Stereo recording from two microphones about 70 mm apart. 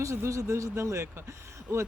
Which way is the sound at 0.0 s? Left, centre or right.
Right.